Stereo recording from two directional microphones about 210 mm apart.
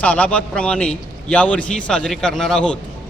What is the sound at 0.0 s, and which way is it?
A man's voice, 5° left (ahead or behind).